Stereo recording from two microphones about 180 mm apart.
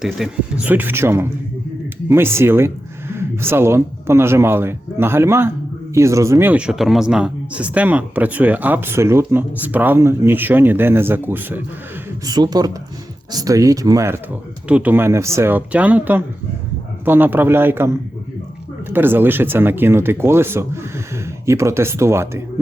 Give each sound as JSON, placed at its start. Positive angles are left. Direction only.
{"t": 0.0, "sound": "speech", "side_deg": -5}
{"t": 12.2, "sound": "speech", "side_deg": -20}